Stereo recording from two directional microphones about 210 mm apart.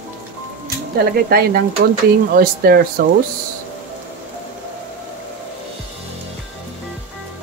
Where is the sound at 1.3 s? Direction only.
45° right (ahead or behind).